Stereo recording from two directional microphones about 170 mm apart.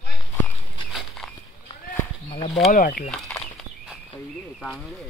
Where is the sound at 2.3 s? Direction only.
30° left (ahead or behind).